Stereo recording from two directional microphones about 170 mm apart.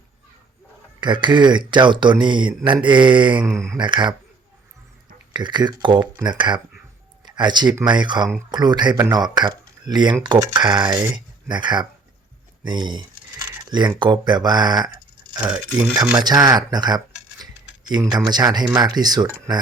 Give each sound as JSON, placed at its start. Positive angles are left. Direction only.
{"t": 1.0, "sound": "speech", "side_deg": -25}
{"t": 5.3, "sound": "speech", "side_deg": -25}
{"t": 15.4, "sound": "speech", "side_deg": -5}
{"t": 16.2, "sound": "speech", "side_deg": -25}